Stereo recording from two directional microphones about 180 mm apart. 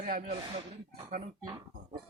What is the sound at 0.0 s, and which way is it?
Speech, 40° right (ahead or behind).